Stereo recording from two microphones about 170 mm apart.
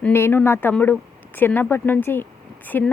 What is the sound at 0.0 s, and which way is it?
A woman's voice, 15° left (ahead or behind).